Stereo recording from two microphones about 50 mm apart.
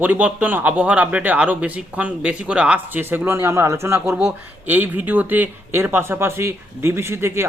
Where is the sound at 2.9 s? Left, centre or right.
Right.